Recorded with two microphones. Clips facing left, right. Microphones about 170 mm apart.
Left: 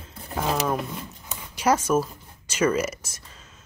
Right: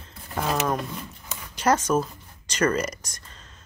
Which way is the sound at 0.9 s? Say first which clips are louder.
Left 1 dB; 20° left (ahead or behind).